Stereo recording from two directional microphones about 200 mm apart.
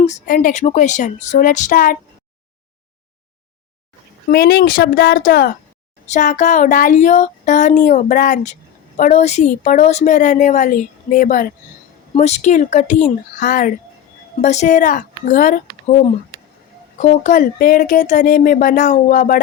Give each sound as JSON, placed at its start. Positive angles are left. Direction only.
{"t": 0.0, "sound": "a woman's voice", "side_deg": 40}
{"t": 4.3, "sound": "a woman's voice", "side_deg": 55}